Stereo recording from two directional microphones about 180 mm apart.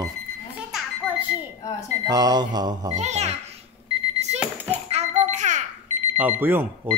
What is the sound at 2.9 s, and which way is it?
Speech, 40° right (ahead or behind).